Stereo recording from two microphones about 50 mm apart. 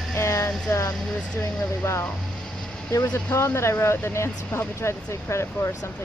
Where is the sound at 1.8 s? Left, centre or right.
Left.